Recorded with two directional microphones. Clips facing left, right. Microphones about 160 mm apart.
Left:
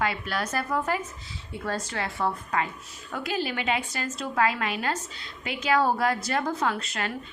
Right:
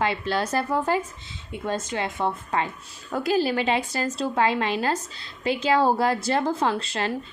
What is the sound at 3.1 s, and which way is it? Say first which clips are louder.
A woman's voice: right 7 dB; 35° right (ahead or behind).